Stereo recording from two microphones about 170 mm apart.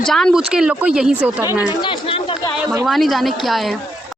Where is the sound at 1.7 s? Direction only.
30° left (ahead or behind).